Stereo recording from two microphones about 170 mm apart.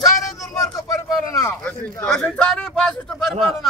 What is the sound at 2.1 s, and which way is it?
A man's voice, 5° left (ahead or behind).